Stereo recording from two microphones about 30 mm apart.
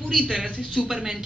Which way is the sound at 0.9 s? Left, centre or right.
Right.